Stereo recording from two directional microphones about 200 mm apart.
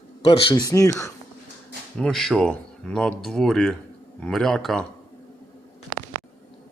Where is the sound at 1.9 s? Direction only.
Centre (ahead or behind).